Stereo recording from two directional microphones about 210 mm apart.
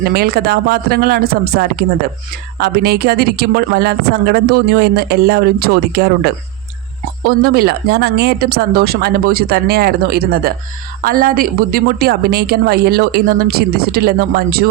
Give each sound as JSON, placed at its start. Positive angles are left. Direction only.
{"t": 0.1, "sound": "speech", "side_deg": -45}